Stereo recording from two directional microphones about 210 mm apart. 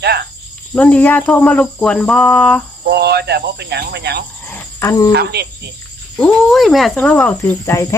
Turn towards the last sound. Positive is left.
turn(degrees=10)  # may be behind; listen again after turning